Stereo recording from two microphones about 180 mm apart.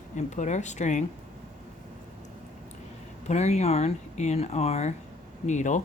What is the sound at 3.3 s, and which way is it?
Speech, 40° left (ahead or behind).